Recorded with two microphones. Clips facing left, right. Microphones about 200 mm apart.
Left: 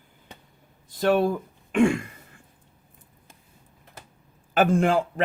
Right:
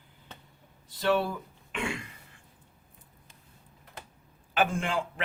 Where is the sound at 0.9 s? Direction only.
45° left (ahead or behind).